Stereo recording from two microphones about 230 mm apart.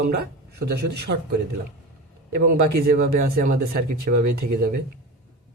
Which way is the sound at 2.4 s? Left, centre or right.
Right.